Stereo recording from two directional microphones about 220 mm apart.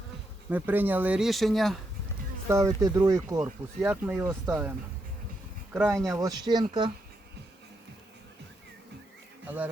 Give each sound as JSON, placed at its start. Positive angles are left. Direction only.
{"t": 0.5, "sound": "speech", "side_deg": -10}
{"t": 2.5, "sound": "speech", "side_deg": -15}
{"t": 5.7, "sound": "speech", "side_deg": -10}